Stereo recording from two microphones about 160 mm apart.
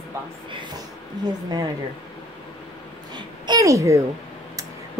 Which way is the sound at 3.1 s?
25° right (ahead or behind).